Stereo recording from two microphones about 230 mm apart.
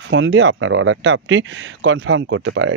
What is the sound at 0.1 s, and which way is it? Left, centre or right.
Speech, right.